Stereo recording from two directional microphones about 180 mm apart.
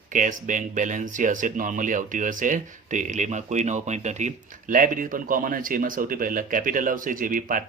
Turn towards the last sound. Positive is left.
turn(degrees=-50)  # may be behind; listen again after turning